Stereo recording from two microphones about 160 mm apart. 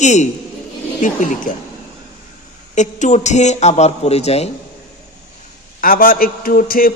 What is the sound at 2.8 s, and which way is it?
A man's voice, 50° left (ahead or behind).